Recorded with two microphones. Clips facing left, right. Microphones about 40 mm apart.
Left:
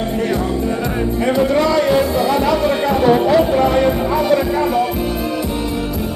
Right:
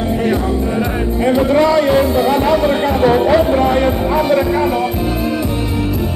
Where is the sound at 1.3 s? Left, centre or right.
Centre.